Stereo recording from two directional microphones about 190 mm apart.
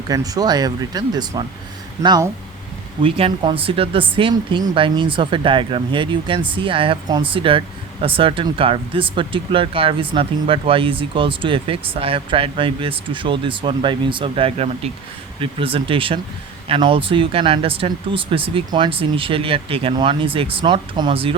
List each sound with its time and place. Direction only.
0.1 s speech: 20° right (ahead or behind)